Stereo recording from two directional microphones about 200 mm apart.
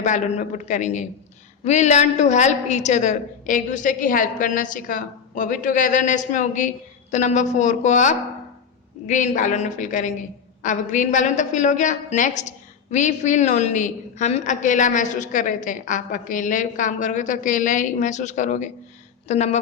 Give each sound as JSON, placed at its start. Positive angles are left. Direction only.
{"t": 0.0, "sound": "a woman's voice", "side_deg": 35}